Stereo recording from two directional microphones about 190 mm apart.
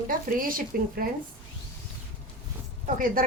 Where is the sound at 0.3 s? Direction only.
45° right (ahead or behind).